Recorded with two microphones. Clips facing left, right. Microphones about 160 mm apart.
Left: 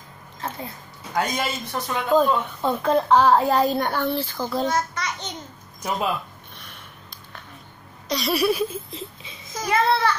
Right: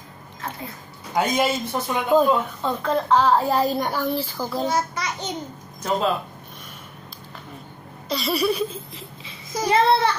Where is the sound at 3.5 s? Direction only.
5° right (ahead or behind).